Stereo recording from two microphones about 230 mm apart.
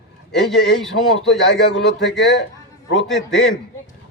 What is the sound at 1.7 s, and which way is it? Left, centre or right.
Speech, left.